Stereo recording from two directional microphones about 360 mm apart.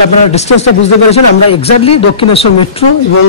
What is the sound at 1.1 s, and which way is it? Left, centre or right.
Speech, centre.